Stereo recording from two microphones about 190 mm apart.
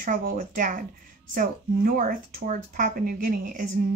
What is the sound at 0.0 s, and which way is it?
Speech, 50° right (ahead or behind).